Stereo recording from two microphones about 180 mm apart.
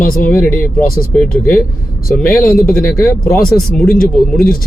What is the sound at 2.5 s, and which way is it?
Speech, 55° left (ahead or behind).